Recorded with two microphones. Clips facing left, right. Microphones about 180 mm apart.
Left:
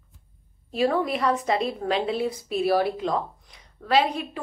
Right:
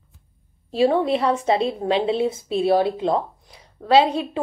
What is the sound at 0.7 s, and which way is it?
A woman's voice, 30° right (ahead or behind).